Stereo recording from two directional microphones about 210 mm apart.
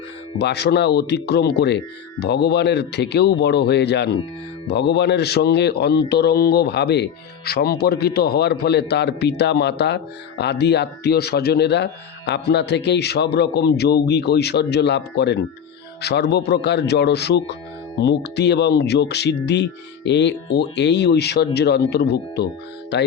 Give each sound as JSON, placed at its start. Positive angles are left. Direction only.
{"t": 0.3, "sound": "speech", "side_deg": 50}